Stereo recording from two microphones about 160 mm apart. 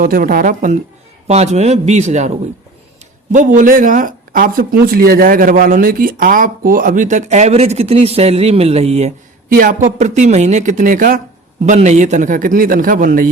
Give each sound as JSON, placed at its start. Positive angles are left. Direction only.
{"t": 0.0, "sound": "speech", "side_deg": -65}
{"t": 1.3, "sound": "speech", "side_deg": -45}
{"t": 9.5, "sound": "speech", "side_deg": -60}